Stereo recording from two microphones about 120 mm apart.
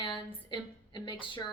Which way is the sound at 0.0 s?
40° left (ahead or behind).